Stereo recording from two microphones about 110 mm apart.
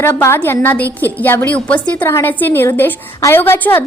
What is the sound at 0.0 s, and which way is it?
A woman's voice, 25° left (ahead or behind).